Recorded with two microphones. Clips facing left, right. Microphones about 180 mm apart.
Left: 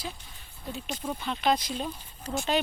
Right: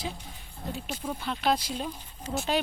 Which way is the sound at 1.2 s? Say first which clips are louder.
Left 1 dB; 5° right (ahead or behind).